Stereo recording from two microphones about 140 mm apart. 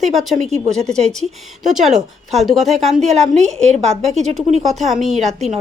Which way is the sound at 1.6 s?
Centre (ahead or behind).